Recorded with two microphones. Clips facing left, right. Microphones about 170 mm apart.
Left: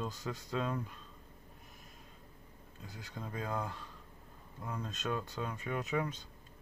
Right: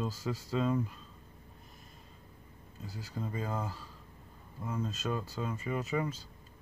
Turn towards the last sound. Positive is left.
turn(degrees=0)  # may be behind; listen again after turning